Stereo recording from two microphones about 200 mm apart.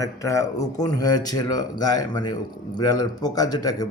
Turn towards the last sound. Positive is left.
turn(degrees=20)  # may be behind; listen again after turning